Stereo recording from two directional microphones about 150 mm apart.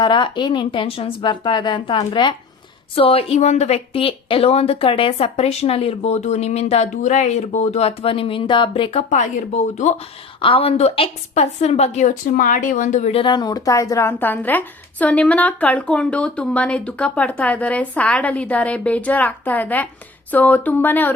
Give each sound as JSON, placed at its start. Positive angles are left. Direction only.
{"t": 0.0, "sound": "a woman's voice", "side_deg": 30}
{"t": 10.4, "sound": "a woman's voice", "side_deg": 40}
{"t": 13.2, "sound": "a woman's voice", "side_deg": 30}